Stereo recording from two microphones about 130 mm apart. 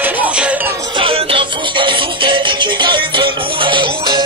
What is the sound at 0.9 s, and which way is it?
Music, 45° right (ahead or behind).